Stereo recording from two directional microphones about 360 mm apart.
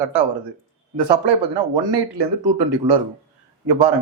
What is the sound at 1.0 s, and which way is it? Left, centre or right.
Speech, right.